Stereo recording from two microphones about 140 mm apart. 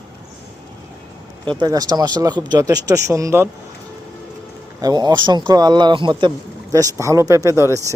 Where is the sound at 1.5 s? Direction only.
30° right (ahead or behind).